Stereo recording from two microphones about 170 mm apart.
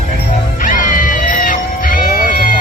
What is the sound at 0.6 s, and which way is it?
Music, 55° left (ahead or behind).